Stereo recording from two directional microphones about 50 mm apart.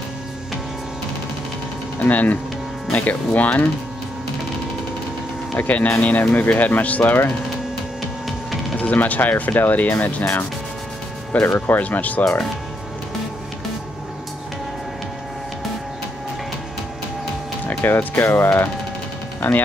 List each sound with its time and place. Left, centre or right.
2.0 s speech: left
5.6 s speech: left
8.7 s speech: left
11.3 s speech: left
17.6 s speech: left
19.4 s speech: left